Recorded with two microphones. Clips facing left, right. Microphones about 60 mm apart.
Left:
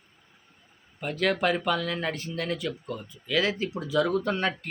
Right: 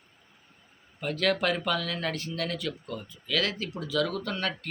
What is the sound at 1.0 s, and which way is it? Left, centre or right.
Speech, centre.